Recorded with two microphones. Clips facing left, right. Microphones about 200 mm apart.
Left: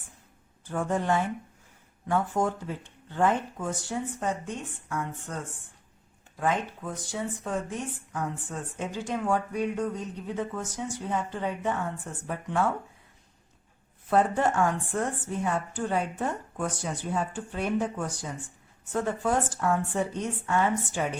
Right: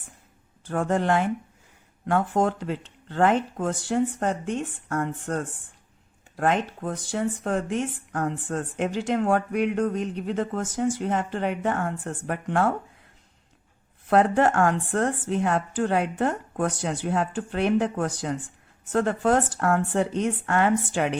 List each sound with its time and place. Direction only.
0.7 s a woman's voice: 75° right (ahead or behind)
7.1 s a woman's voice: 75° right (ahead or behind)
14.1 s a woman's voice: 75° right (ahead or behind)